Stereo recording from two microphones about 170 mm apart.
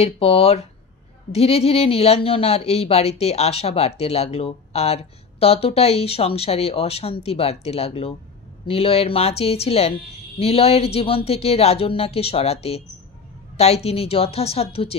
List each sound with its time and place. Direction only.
0.0 s speech: 35° left (ahead or behind)